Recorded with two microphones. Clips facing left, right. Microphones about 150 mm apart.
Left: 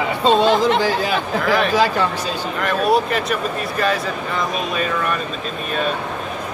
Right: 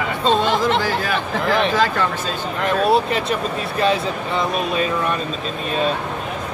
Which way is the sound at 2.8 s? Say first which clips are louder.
Left 1 dB; 25° right (ahead or behind).